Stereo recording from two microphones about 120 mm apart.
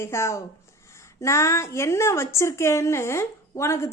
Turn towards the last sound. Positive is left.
turn(degrees=20)  # may be behind; listen again after turning